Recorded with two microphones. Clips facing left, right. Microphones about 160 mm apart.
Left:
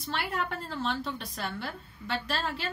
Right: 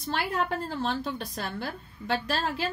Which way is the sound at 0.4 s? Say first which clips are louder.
Right 4 dB; 40° right (ahead or behind).